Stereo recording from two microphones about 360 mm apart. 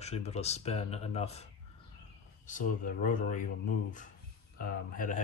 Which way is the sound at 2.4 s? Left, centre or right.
Left.